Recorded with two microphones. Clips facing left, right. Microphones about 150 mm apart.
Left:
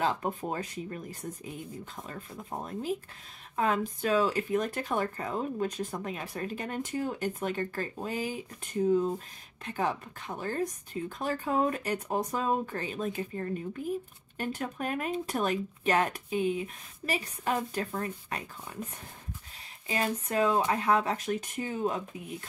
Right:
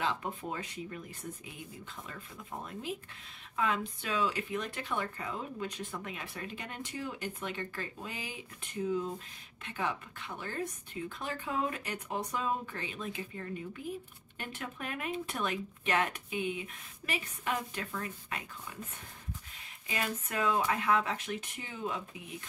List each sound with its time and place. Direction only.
0.0 s speech: 40° left (ahead or behind)
19.9 s speech: 35° left (ahead or behind)